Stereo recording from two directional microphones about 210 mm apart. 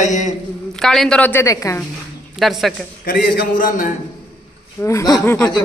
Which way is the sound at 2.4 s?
Centre (ahead or behind).